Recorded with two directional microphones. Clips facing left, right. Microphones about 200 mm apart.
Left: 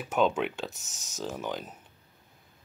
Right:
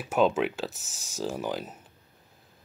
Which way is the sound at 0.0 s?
5° right (ahead or behind).